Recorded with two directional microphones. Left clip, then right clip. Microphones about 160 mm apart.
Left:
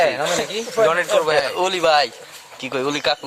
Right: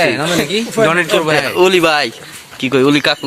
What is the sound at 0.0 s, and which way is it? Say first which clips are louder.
Speech: right 4 dB; 20° right (ahead or behind).